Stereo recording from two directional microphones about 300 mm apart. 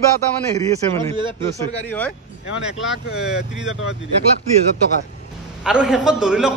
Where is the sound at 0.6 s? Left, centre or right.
Centre.